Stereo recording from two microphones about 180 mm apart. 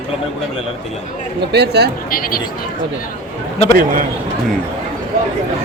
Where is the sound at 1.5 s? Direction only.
65° right (ahead or behind).